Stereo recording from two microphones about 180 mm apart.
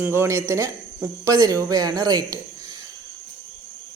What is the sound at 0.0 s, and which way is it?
Speech, 15° right (ahead or behind).